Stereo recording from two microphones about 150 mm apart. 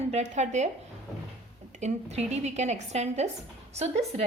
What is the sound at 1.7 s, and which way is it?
A woman's voice, 50° right (ahead or behind).